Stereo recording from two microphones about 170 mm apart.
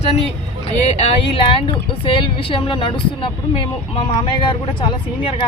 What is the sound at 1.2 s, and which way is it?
Speech, 30° left (ahead or behind).